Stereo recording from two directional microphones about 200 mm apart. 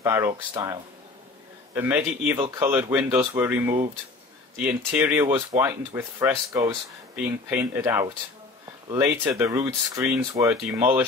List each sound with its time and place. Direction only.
0.0 s speech: 15° right (ahead or behind)
1.8 s speech: 10° right (ahead or behind)